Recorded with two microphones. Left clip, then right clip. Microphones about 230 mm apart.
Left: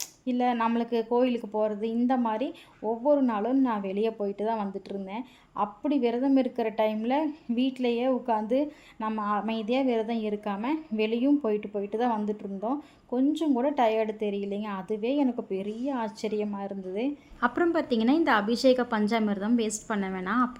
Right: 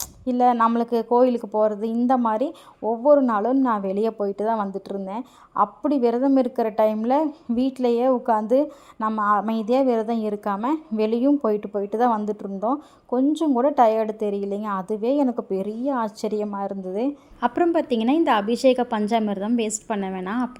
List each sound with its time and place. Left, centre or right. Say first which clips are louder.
0.0 s speech: right 8 dB; right
17.4 s a woman's voice: right 5 dB; centre